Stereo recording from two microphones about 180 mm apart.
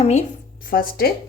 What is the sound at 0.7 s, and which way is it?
Speech, 55° left (ahead or behind).